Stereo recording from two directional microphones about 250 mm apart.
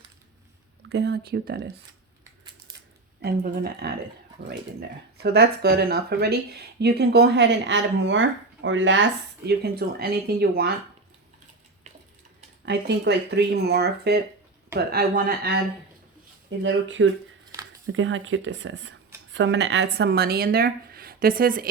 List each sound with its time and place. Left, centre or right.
0.9 s speech: right
3.2 s speech: right
12.6 s speech: right
16.6 s speech: right